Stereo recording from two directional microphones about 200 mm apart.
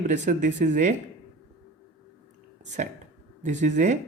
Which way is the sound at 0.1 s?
40° right (ahead or behind).